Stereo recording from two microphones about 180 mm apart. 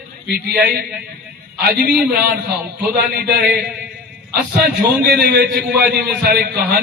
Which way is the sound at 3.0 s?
60° right (ahead or behind).